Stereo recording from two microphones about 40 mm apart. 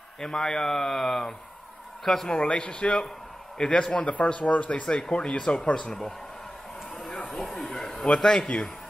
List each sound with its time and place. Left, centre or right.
0.2 s speech: centre
2.2 s a man's voice: left
4.9 s speech: left
5.9 s speech: centre
7.0 s a sound: centre
8.1 s speech: centre